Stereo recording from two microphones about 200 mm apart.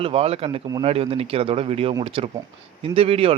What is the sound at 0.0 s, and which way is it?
A man's voice, 30° right (ahead or behind).